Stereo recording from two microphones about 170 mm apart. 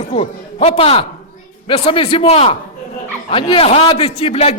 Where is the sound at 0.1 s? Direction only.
35° left (ahead or behind).